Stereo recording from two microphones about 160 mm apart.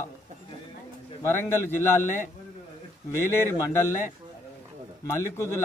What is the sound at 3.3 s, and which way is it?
Speech, 15° left (ahead or behind).